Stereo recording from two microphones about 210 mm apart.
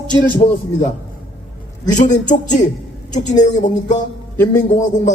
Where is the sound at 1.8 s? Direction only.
35° left (ahead or behind).